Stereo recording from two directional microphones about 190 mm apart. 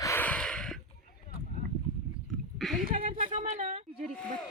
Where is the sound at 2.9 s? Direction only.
30° right (ahead or behind).